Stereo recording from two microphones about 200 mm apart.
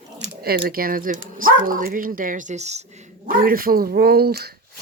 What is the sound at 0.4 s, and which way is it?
Speech, 50° right (ahead or behind).